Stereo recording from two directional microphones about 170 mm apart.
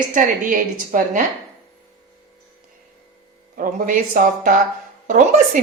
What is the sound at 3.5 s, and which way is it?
A woman's voice, 55° right (ahead or behind).